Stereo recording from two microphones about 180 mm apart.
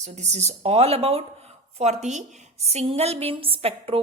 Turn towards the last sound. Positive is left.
turn(degrees=-30)  # may be behind; listen again after turning